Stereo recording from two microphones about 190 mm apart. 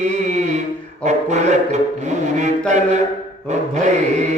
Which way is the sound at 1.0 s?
35° right (ahead or behind).